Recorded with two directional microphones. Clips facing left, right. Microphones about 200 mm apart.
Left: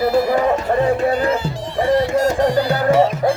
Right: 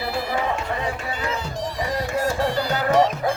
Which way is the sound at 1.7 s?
30° left (ahead or behind).